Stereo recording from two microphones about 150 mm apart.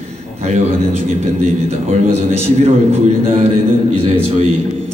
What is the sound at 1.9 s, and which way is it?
A man's voice, 45° right (ahead or behind).